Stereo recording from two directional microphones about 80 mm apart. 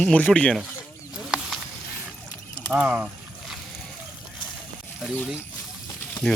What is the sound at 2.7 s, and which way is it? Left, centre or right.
Speech, centre.